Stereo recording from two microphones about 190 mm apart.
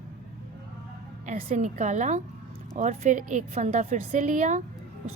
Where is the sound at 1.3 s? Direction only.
40° right (ahead or behind).